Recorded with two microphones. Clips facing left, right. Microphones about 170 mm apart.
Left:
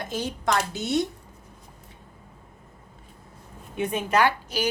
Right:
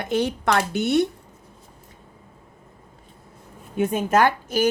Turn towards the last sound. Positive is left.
turn(degrees=-50)  # may be behind; listen again after turning